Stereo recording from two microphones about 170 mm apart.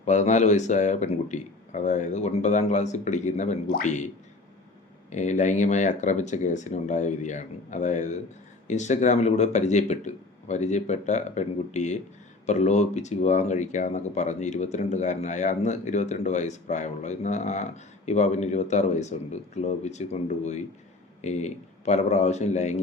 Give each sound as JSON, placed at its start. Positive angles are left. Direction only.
{"t": 0.0, "sound": "speech", "side_deg": 45}
{"t": 5.1, "sound": "a man's voice", "side_deg": 45}